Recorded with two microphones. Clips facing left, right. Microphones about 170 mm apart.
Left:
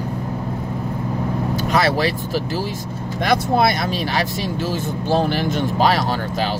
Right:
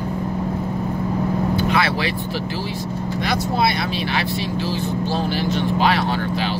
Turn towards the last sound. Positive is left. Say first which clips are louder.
# even
turn(degrees=40)  # may be behind; listen again after turning